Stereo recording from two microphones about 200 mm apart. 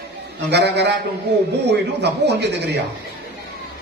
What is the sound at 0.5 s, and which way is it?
A man's voice, 60° right (ahead or behind).